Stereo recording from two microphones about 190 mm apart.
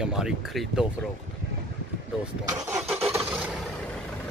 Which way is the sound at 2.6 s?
10° right (ahead or behind).